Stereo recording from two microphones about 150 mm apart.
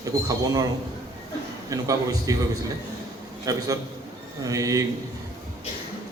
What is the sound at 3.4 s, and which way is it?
A man's voice, 25° right (ahead or behind).